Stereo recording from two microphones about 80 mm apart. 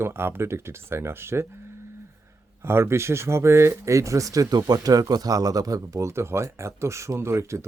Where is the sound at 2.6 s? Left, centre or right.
Right.